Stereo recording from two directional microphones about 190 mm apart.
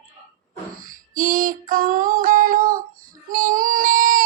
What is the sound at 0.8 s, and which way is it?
Female singing, 45° right (ahead or behind).